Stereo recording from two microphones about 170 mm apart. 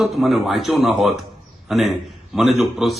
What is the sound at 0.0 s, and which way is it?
Speech, centre (ahead or behind).